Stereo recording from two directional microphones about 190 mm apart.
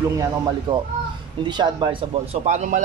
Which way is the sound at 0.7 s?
25° right (ahead or behind).